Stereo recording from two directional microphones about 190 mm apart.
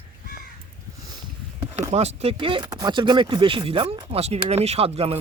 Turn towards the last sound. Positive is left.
turn(degrees=-30)  # may be behind; listen again after turning